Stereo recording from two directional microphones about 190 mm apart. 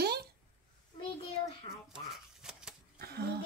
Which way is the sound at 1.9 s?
5° right (ahead or behind).